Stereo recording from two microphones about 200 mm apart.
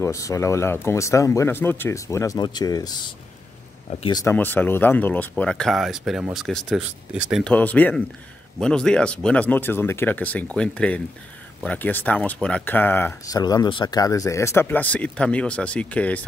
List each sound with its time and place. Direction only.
0.0 s speech: 15° left (ahead or behind)
4.2 s speech: 10° left (ahead or behind)